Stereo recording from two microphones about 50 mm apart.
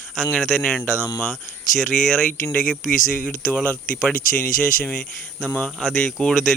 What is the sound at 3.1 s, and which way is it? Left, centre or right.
Speech, left.